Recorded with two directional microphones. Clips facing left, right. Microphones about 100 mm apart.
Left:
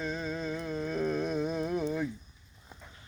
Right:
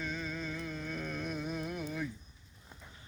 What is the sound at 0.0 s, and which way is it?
Music, 35° left (ahead or behind).